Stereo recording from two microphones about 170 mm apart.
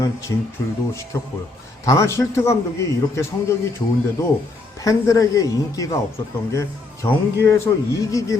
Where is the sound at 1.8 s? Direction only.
20° left (ahead or behind).